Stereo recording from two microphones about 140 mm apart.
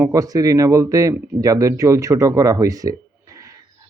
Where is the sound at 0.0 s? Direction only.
25° right (ahead or behind).